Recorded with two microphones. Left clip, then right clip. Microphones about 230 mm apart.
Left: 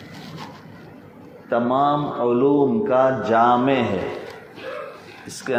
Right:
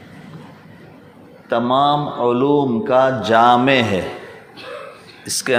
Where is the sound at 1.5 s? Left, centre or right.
Right.